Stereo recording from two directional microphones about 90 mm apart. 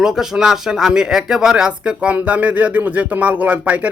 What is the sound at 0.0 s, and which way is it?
Speech, 5° right (ahead or behind).